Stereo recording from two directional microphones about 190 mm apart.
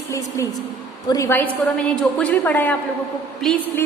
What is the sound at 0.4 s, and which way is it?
A woman's voice, 15° left (ahead or behind).